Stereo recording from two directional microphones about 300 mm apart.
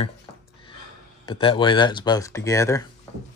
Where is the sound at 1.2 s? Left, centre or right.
Centre.